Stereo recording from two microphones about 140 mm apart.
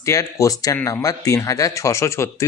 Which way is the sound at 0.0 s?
25° left (ahead or behind).